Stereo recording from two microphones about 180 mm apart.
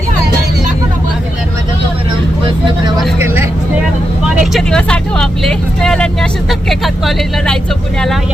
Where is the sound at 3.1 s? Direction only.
15° right (ahead or behind).